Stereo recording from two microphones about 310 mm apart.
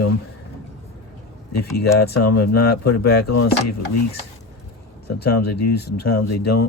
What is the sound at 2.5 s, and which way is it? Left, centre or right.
Speech, left.